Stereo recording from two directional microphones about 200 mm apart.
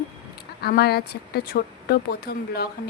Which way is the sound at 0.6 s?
50° left (ahead or behind).